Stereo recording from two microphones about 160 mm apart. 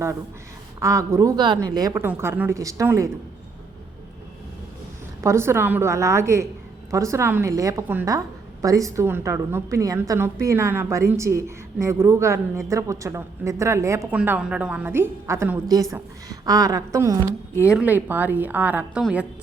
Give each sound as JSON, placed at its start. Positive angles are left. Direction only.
{"t": 0.8, "sound": "a woman's voice", "side_deg": -20}
{"t": 5.2, "sound": "a woman's voice", "side_deg": -15}
{"t": 14.2, "sound": "a woman's voice", "side_deg": -10}
{"t": 17.7, "sound": "a woman's voice", "side_deg": -10}